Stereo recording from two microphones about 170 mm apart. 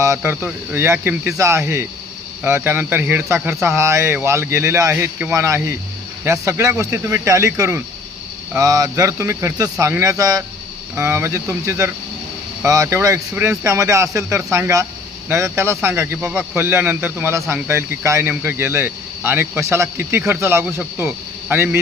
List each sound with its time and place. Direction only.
0.0 s a man's voice: 15° right (ahead or behind)